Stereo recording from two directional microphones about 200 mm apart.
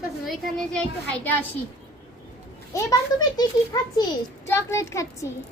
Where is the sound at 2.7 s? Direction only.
20° left (ahead or behind).